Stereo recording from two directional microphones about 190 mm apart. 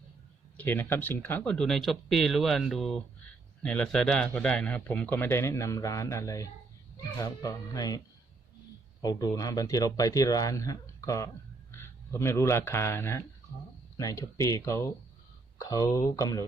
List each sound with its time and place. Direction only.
0.5 s a man's voice: 10° left (ahead or behind)